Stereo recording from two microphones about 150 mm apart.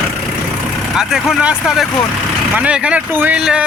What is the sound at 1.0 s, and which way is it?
Speech, 5° right (ahead or behind).